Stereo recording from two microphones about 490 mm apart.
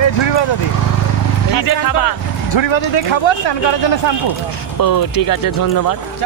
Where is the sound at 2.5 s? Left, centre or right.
Left.